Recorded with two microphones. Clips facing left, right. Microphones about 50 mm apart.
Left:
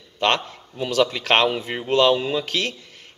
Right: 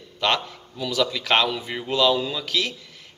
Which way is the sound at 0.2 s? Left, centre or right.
Left.